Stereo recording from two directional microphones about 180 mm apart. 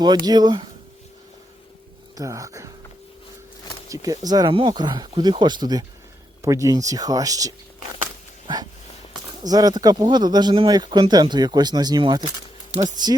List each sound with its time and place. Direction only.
0.0 s speech: 20° right (ahead or behind)
2.1 s speech: 20° right (ahead or behind)
3.8 s speech: 20° right (ahead or behind)
9.4 s speech: 20° right (ahead or behind)